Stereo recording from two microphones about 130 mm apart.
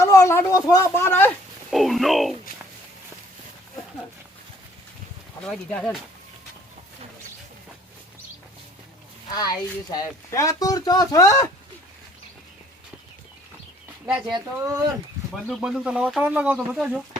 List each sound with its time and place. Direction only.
0.0 s speech: 25° left (ahead or behind)
1.7 s speech: centre (ahead or behind)
5.4 s speech: 5° left (ahead or behind)
9.3 s speech: 30° left (ahead or behind)
14.0 s speech: 10° right (ahead or behind)
14.3 s speech: 30° right (ahead or behind)
15.4 s speech: centre (ahead or behind)